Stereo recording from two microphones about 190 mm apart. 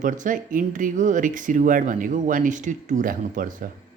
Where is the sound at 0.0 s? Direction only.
45° right (ahead or behind).